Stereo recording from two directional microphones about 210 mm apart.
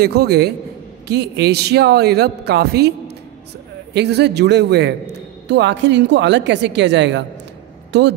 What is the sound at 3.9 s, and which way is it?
A man's voice, 55° right (ahead or behind).